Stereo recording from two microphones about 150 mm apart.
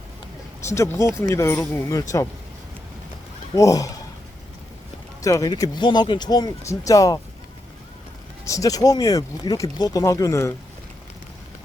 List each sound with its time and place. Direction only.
0.7 s speech: 20° left (ahead or behind)
3.5 s speech: 25° left (ahead or behind)
5.2 s speech: 20° left (ahead or behind)
8.4 s speech: 20° left (ahead or behind)